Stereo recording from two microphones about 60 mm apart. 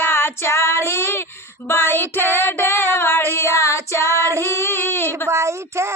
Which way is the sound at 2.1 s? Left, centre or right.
Left.